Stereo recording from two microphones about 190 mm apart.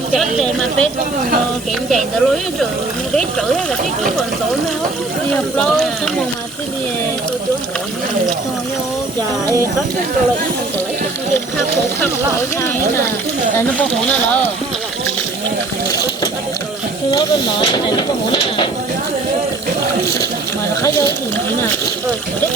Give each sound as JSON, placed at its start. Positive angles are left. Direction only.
{"t": 0.1, "sound": "speech", "side_deg": 0}
{"t": 1.9, "sound": "speech", "side_deg": 0}
{"t": 5.5, "sound": "speech", "side_deg": 5}
{"t": 17.1, "sound": "speech", "side_deg": 25}